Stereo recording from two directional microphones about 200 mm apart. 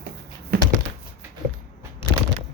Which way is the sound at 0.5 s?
50° right (ahead or behind).